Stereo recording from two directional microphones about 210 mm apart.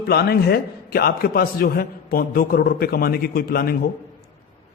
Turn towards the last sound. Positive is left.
turn(degrees=45)  # may be behind; listen again after turning